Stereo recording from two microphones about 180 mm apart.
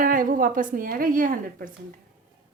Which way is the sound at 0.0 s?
50° right (ahead or behind).